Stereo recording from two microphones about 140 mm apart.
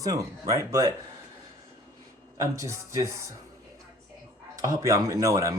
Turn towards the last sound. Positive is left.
turn(degrees=-25)  # may be behind; listen again after turning